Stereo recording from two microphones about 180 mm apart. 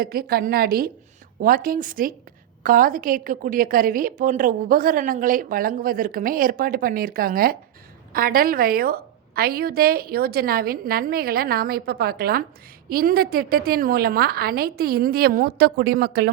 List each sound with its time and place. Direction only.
0.0 s a woman's voice: 55° right (ahead or behind)